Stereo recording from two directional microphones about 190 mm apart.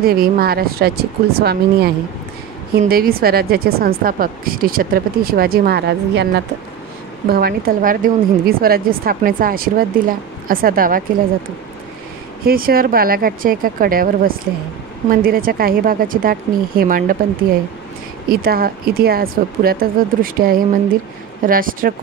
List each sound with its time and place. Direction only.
0.0 s a woman's voice: 50° right (ahead or behind)
2.9 s a woman's voice: 50° right (ahead or behind)
12.4 s a woman's voice: 50° right (ahead or behind)